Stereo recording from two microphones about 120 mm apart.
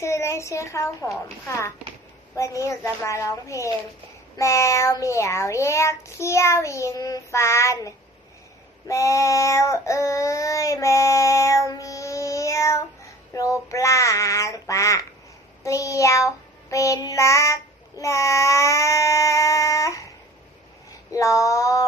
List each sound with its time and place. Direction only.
0.0 s speech: 25° left (ahead or behind)
2.3 s speech: 25° left (ahead or behind)
11.7 s child singing: 25° left (ahead or behind)
13.3 s speech: 25° left (ahead or behind)
15.6 s child singing: 25° left (ahead or behind)
21.1 s speech: 25° left (ahead or behind)